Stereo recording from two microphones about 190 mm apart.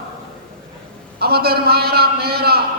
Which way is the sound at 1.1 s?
55° right (ahead or behind).